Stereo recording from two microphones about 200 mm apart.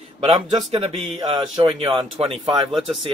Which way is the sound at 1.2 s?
25° right (ahead or behind).